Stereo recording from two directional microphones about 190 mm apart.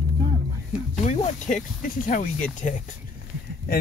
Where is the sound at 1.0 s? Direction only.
40° left (ahead or behind).